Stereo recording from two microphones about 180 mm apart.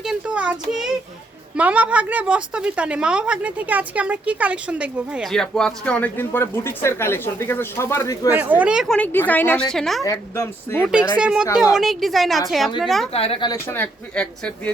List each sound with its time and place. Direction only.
0.0 s child singing: 5° right (ahead or behind)
0.7 s a woman's voice: 5° right (ahead or behind); by 8.3 s 20° left (ahead or behind)
8.3 s a woman's voice: 10° right (ahead or behind)
10.0 s speech: 15° left (ahead or behind)
10.8 s a woman's voice: 5° right (ahead or behind)
13.1 s speech: 30° left (ahead or behind)
13.5 s speech: 10° left (ahead or behind)